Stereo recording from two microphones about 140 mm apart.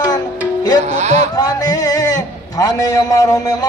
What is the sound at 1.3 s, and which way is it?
A man's voice, 25° left (ahead or behind).